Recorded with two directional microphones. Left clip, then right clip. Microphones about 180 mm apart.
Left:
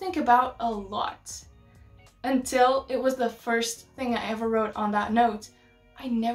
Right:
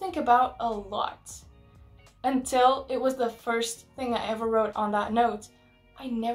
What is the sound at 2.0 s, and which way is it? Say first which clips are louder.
Speech: even; centre (ahead or behind).